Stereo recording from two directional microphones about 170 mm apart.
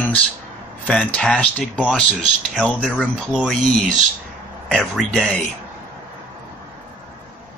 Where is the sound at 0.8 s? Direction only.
5° left (ahead or behind).